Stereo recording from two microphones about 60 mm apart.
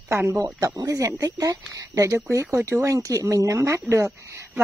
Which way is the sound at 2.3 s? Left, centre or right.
Right.